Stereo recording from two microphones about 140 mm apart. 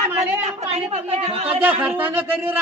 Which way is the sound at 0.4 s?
50° right (ahead or behind).